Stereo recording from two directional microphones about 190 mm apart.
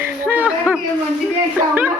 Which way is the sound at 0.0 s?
10° right (ahead or behind).